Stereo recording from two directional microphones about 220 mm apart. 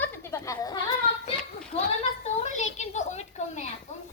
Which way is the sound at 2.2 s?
30° left (ahead or behind).